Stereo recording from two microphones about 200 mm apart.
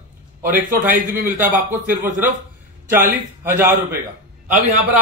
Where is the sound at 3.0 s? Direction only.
10° right (ahead or behind).